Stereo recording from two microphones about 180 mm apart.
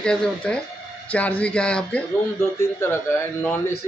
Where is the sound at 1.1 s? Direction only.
10° left (ahead or behind).